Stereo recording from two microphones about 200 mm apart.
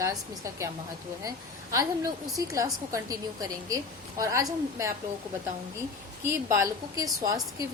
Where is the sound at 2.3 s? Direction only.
15° right (ahead or behind).